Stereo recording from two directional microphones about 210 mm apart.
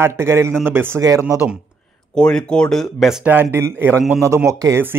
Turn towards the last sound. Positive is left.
turn(degrees=-15)  # may be behind; listen again after turning